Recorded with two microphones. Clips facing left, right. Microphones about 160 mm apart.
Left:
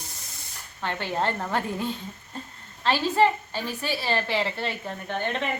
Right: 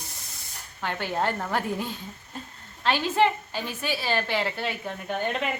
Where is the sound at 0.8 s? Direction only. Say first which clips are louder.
Even; centre (ahead or behind).